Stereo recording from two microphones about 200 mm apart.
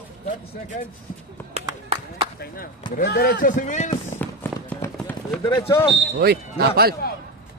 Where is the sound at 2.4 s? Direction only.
45° left (ahead or behind).